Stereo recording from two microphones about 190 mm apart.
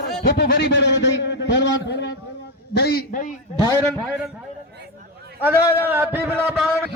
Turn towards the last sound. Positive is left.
turn(degrees=-10)  # may be behind; listen again after turning